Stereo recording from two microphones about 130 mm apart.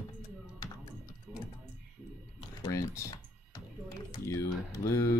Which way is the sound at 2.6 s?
25° left (ahead or behind).